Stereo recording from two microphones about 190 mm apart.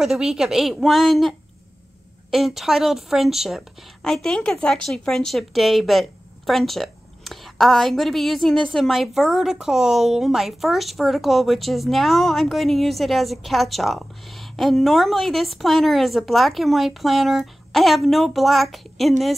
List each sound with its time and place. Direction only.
0.0 s a woman's voice: 5° right (ahead or behind)
2.3 s a woman's voice: centre (ahead or behind)